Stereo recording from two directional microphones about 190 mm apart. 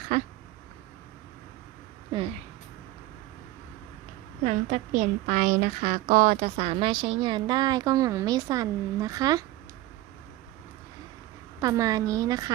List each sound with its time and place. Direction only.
0.1 s speech: 40° right (ahead or behind)
2.1 s speech: 25° right (ahead or behind)
4.4 s a woman's voice: 40° right (ahead or behind); by 9.4 s 20° right (ahead or behind)
11.6 s a woman's voice: 20° right (ahead or behind)